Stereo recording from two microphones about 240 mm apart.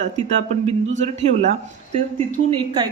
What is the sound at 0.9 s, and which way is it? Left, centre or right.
A woman's voice, right.